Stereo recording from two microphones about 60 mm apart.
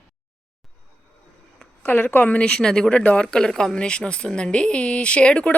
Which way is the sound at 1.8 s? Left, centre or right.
Left.